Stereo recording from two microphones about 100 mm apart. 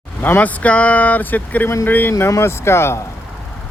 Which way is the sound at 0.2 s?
20° left (ahead or behind).